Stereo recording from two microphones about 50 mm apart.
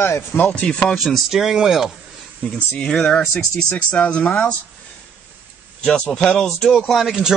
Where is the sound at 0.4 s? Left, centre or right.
Left.